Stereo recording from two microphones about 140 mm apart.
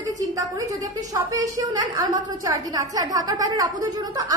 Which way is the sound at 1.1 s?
25° right (ahead or behind).